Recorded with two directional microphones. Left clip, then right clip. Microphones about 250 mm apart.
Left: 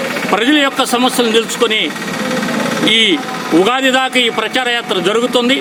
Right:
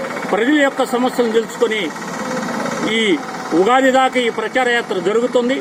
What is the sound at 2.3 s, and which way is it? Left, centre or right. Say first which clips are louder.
Engine: left 4 dB; left.